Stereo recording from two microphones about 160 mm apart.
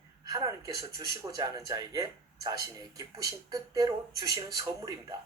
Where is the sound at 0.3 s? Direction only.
20° right (ahead or behind).